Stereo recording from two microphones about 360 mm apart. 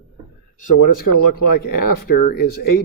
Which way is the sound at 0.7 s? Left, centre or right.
Left.